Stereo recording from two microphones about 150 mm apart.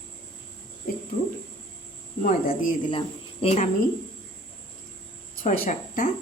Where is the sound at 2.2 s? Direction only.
65° left (ahead or behind).